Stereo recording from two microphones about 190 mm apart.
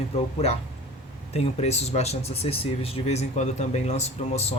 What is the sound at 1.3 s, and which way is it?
Speech, 35° left (ahead or behind).